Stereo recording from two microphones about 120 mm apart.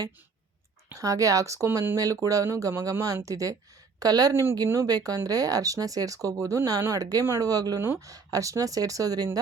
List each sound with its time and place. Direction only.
0.9 s speech: 30° right (ahead or behind)
2.0 s speech: 30° right (ahead or behind)